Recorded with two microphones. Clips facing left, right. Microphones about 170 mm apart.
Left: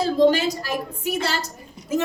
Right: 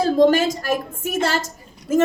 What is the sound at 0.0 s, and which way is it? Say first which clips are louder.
A woman's voice: right 2 dB; 50° right (ahead or behind).